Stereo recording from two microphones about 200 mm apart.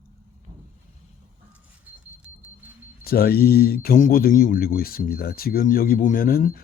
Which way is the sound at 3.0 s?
50° left (ahead or behind).